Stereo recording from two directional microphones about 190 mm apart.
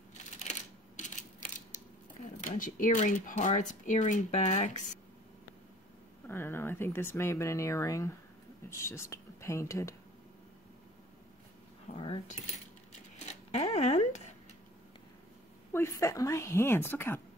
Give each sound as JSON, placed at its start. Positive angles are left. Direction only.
{"t": 0.1, "sound": "typewriter", "side_deg": 40}
{"t": 2.6, "sound": "speech", "side_deg": 40}
{"t": 6.2, "sound": "speech", "side_deg": 10}
{"t": 11.9, "sound": "keys jangling", "side_deg": 30}
{"t": 13.3, "sound": "a sound", "side_deg": 35}
{"t": 15.7, "sound": "speech", "side_deg": 15}